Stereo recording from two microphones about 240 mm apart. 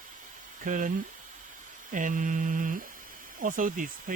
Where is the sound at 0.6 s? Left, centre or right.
Right.